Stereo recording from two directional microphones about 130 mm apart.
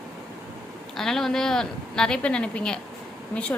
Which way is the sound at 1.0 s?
5° left (ahead or behind).